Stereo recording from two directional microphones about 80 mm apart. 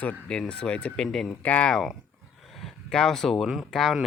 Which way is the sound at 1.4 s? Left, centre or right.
Centre.